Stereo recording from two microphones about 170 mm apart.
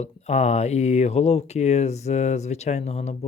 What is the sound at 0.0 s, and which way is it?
Speech, 40° left (ahead or behind).